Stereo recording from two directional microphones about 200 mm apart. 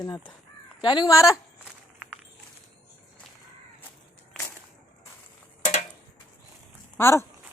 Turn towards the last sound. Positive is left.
turn(degrees=15)  # may be behind; listen again after turning